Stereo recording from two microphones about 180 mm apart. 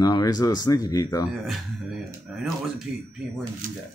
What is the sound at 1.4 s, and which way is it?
Speech, centre (ahead or behind).